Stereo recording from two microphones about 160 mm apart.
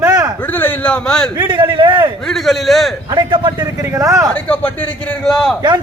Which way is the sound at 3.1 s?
30° right (ahead or behind).